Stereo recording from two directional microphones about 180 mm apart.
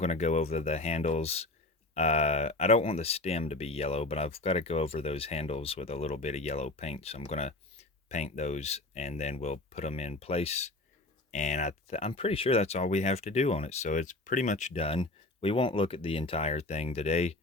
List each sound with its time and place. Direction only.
0.0 s speech: 40° left (ahead or behind)